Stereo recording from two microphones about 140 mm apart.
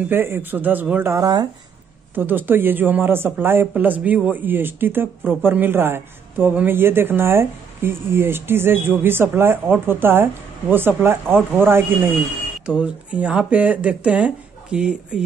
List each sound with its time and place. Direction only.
0.1 s speech: 15° right (ahead or behind)
1.1 s speech: 25° right (ahead or behind)
2.1 s speech: 15° right (ahead or behind)